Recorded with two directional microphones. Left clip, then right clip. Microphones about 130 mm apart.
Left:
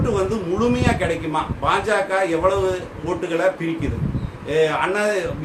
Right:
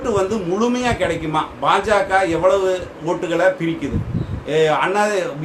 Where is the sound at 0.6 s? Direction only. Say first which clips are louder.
Right 1 dB; 25° right (ahead or behind).